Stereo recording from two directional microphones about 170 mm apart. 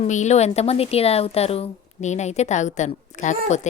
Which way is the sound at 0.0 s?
45° left (ahead or behind).